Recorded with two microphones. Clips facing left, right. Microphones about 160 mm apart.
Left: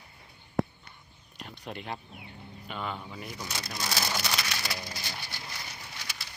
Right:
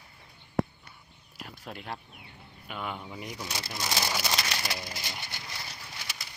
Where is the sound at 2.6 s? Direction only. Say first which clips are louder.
Even; 10° right (ahead or behind).